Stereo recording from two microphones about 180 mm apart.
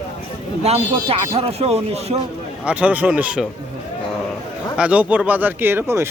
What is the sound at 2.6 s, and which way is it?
Speech, 5° right (ahead or behind).